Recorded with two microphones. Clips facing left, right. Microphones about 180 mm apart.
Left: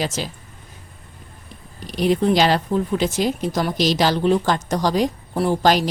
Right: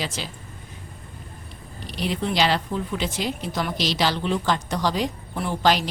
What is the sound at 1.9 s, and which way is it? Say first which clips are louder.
A woman's voice: left 9 dB; 45° left (ahead or behind).